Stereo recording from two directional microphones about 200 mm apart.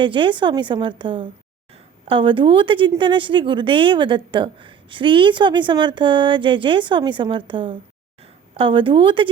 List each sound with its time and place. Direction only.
0.0 s a woman's voice: 25° right (ahead or behind)